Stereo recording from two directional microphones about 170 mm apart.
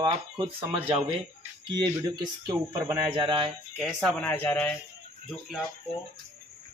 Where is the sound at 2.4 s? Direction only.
20° right (ahead or behind).